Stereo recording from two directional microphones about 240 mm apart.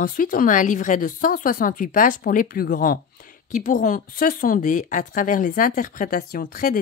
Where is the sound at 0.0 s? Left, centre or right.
Left.